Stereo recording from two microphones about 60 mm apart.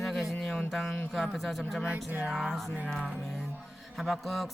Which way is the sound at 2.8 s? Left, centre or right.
Centre.